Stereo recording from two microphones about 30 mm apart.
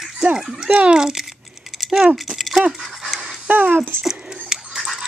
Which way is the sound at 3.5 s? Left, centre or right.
Right.